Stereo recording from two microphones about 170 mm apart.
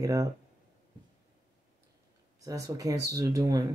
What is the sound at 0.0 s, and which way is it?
Speech, 20° right (ahead or behind).